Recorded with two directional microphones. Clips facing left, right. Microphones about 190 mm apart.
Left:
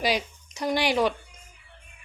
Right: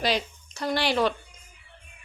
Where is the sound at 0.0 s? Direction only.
10° left (ahead or behind).